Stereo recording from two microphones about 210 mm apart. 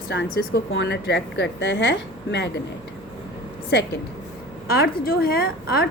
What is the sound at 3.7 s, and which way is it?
A woman's voice, 55° left (ahead or behind).